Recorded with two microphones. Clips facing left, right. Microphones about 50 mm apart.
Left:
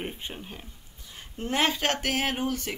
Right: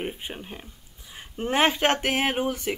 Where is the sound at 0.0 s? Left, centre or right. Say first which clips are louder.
Right 3 dB; centre.